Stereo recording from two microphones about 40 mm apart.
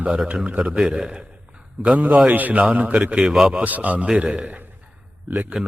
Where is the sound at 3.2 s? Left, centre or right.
Centre.